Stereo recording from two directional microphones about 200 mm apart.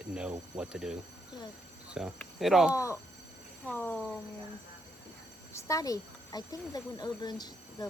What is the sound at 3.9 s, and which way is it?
Speech, 5° right (ahead or behind).